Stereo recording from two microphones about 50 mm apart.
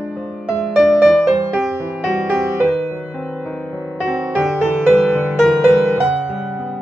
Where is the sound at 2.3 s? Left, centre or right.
Centre.